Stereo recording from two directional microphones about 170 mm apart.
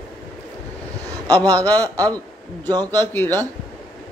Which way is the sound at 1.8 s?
20° right (ahead or behind).